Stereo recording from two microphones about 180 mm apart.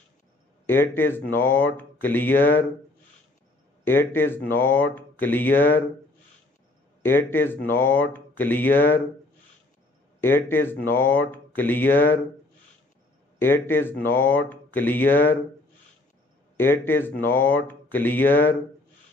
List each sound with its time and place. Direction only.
0.7 s speech: 10° left (ahead or behind)
3.8 s speech: 10° left (ahead or behind)
7.0 s speech: 10° left (ahead or behind)
10.2 s speech: 10° left (ahead or behind)
13.4 s speech: 10° left (ahead or behind)
16.5 s speech: 10° left (ahead or behind)